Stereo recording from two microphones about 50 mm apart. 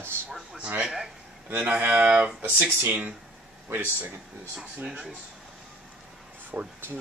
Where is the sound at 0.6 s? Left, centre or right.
Right.